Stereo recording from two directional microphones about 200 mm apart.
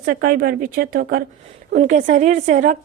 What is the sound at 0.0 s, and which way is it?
A woman's voice, 45° right (ahead or behind).